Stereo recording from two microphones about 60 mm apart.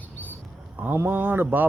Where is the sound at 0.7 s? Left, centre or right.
Right.